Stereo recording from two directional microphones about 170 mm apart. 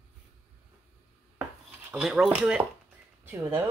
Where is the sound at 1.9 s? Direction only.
5° right (ahead or behind).